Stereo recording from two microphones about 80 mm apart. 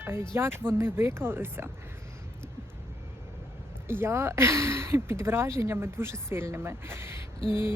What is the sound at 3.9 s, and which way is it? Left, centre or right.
Speech, right.